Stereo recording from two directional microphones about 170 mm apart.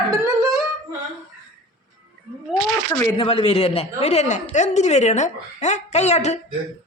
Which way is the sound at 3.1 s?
35° left (ahead or behind).